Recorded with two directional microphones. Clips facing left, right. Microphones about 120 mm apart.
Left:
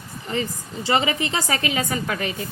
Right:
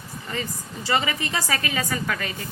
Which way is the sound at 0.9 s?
25° left (ahead or behind).